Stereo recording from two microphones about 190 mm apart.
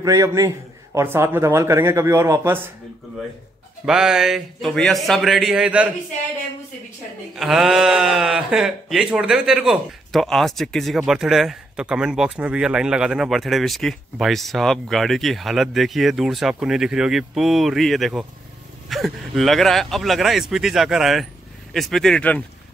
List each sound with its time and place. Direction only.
0.0 s speech: 15° right (ahead or behind)
3.8 s speech: 5° right (ahead or behind)
7.3 s speech: centre (ahead or behind)